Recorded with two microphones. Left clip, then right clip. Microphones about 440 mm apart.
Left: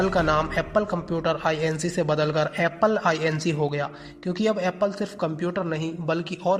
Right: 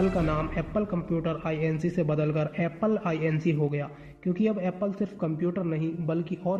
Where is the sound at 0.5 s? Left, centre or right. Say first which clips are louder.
Left 6 dB; left.